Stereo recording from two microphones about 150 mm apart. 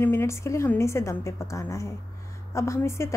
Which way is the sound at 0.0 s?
15° left (ahead or behind).